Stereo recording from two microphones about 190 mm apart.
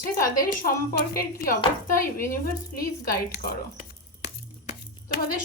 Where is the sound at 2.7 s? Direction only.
50° left (ahead or behind).